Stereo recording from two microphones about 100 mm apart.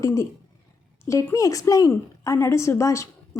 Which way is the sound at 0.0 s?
30° left (ahead or behind).